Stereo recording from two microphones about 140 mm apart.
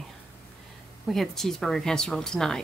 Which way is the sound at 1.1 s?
Centre (ahead or behind).